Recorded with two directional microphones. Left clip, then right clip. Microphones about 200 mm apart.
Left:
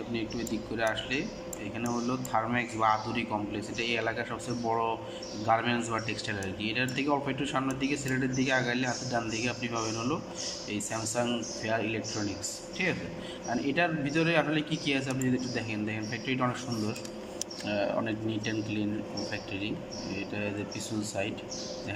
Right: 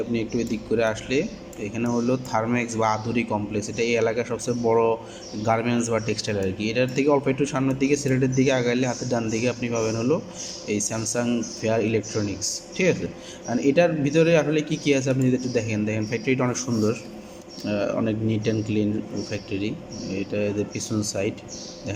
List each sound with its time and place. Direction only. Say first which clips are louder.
0.1 s speech: right 8 dB; 25° right (ahead or behind)
17.7 s speech: right 6 dB; 25° right (ahead or behind)